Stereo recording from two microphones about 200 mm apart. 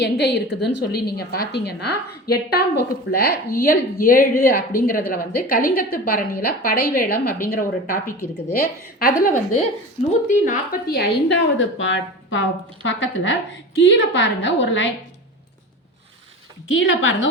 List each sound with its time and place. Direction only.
0.0 s a woman's voice: 55° left (ahead or behind)
16.7 s a woman's voice: 70° left (ahead or behind)